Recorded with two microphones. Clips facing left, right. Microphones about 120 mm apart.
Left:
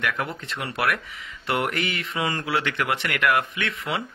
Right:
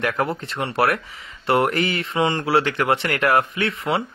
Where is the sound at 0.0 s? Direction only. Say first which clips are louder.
Right 5 dB; 35° right (ahead or behind).